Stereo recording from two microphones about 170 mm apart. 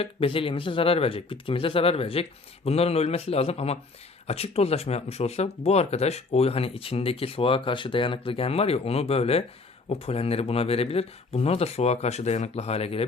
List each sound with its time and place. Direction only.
0.0 s speech: 35° left (ahead or behind)